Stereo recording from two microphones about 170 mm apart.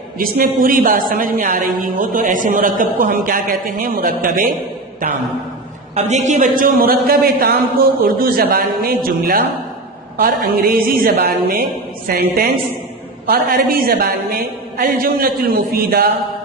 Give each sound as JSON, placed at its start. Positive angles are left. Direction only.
{"t": 0.2, "sound": "a woman's voice", "side_deg": -60}
{"t": 5.9, "sound": "speech", "side_deg": -40}
{"t": 6.6, "sound": "a woman's voice", "side_deg": -55}